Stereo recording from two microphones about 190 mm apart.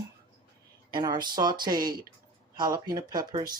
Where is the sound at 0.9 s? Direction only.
25° right (ahead or behind).